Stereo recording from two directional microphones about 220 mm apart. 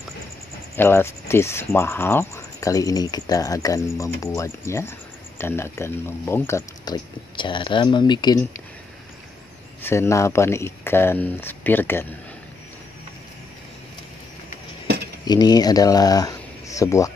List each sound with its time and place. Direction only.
0.7 s speech: 10° left (ahead or behind)
9.8 s speech: 10° left (ahead or behind)
15.2 s speech: 20° left (ahead or behind)